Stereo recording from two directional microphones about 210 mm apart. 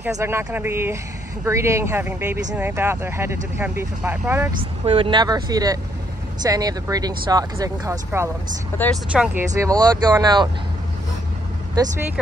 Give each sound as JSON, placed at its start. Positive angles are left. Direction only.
{"t": 0.0, "sound": "speech", "side_deg": -10}
{"t": 4.8, "sound": "speech", "side_deg": -25}